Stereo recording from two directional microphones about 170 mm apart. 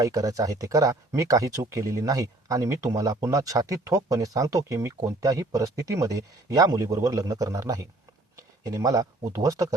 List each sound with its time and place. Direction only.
0.0 s speech: 20° right (ahead or behind)